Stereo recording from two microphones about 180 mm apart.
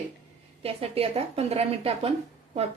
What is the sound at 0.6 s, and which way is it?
Speech, 35° right (ahead or behind).